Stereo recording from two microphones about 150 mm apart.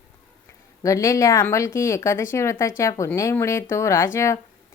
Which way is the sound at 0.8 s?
20° left (ahead or behind).